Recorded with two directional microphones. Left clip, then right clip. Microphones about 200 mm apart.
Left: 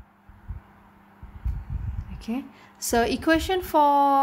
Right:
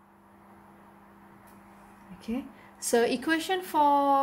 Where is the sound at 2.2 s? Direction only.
40° left (ahead or behind).